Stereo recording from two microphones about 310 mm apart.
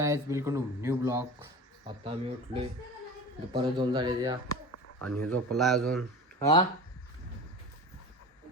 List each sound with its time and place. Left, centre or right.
0.0 s speech: centre
5.2 s a man's voice: centre
6.4 s speech: centre